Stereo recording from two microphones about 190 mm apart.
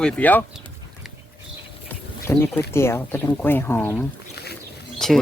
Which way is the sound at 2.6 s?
15° left (ahead or behind).